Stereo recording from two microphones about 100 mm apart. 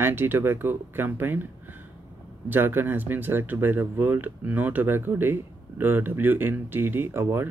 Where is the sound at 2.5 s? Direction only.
20° right (ahead or behind).